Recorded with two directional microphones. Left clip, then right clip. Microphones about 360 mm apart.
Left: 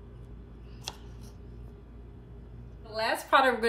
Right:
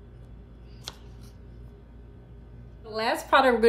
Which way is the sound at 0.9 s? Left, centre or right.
Centre.